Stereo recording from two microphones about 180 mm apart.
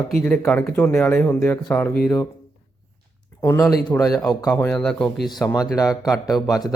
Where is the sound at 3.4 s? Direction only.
20° left (ahead or behind).